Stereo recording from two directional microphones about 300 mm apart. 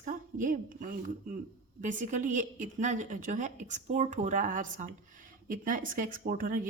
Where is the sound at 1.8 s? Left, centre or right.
Right.